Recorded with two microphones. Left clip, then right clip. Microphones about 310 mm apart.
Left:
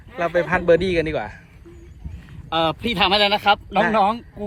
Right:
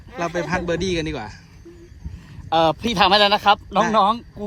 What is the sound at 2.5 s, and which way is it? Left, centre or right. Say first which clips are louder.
Speech: right 3 dB; right.